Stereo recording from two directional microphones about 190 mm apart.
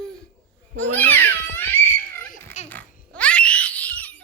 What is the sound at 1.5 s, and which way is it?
Crying, 10° left (ahead or behind).